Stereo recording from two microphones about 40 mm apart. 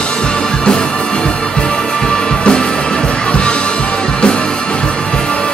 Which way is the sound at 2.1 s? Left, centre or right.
Centre.